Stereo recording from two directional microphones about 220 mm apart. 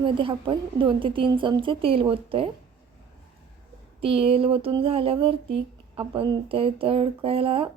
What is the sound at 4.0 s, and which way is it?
Speech, 25° right (ahead or behind).